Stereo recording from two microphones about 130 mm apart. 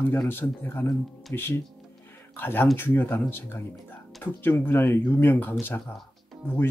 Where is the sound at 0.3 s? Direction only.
15° left (ahead or behind).